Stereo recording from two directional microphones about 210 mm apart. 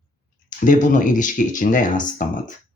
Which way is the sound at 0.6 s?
40° left (ahead or behind).